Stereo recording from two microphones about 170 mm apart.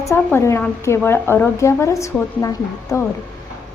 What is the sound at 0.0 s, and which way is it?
A woman's voice, 15° left (ahead or behind).